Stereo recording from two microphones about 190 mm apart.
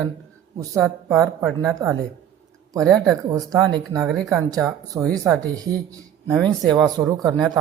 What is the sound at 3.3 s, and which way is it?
Speech, 20° right (ahead or behind).